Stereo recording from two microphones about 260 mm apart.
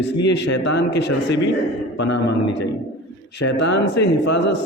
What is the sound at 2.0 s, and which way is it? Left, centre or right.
Speech, left.